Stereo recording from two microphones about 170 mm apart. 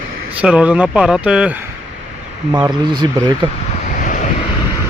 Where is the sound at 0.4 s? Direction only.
5° right (ahead or behind).